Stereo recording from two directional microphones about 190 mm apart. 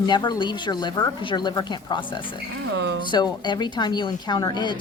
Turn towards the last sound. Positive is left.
turn(degrees=25)  # may be behind; listen again after turning